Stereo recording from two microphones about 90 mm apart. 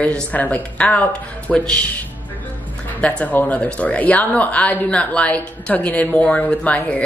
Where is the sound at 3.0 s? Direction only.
15° left (ahead or behind).